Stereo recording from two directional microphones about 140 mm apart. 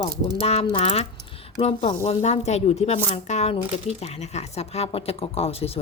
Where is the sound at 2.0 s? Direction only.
50° left (ahead or behind).